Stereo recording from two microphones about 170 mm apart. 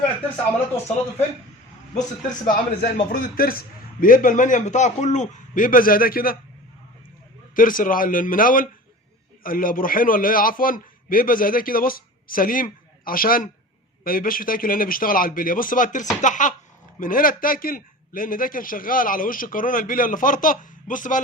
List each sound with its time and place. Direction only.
2.2 s a man's voice: 55° left (ahead or behind)
7.5 s a man's voice: 55° left (ahead or behind)